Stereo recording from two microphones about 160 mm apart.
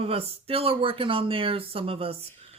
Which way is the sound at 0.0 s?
40° right (ahead or behind).